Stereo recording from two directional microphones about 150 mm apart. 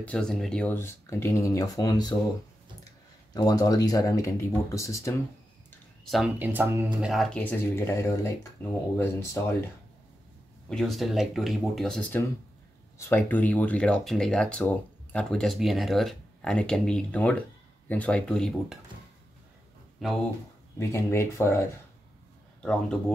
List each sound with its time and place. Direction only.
0.0 s speech: 5° left (ahead or behind); by 2.1 s 25° left (ahead or behind)
3.3 s speech: 25° left (ahead or behind)
6.0 s speech: centre (ahead or behind)
6.3 s speech: 15° right (ahead or behind)
7.1 s speech: 5° left (ahead or behind); by 9.6 s 20° left (ahead or behind)
10.7 s speech: centre (ahead or behind)
20.0 s speech: centre (ahead or behind)
20.9 s speech: 15° left (ahead or behind)
22.6 s speech: 5° left (ahead or behind)